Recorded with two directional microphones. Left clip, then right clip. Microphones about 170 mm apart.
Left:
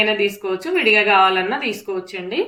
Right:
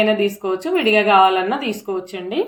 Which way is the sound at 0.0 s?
45° right (ahead or behind).